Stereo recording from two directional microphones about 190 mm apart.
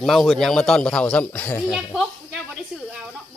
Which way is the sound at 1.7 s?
Centre (ahead or behind).